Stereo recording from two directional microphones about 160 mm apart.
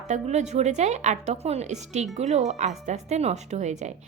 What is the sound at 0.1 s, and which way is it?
A woman's voice, 45° right (ahead or behind).